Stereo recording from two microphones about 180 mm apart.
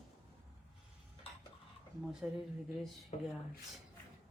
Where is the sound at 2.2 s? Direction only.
5° right (ahead or behind).